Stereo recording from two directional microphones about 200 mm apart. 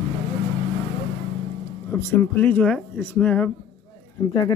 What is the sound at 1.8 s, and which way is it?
Speech, 10° left (ahead or behind).